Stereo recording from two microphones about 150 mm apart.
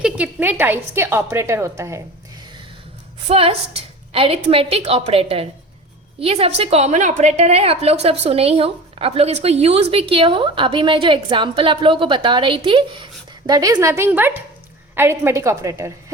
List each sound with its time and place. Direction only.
0.0 s a woman's voice: 10° right (ahead or behind)
3.2 s a woman's voice: 40° right (ahead or behind)
13.5 s a woman's voice: 25° right (ahead or behind)